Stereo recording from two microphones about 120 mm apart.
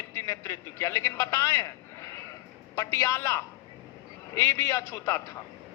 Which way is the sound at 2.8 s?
25° left (ahead or behind).